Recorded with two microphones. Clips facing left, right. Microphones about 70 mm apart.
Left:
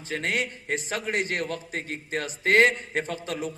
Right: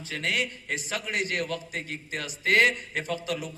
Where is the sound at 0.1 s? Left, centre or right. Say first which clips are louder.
Left 2 dB; left.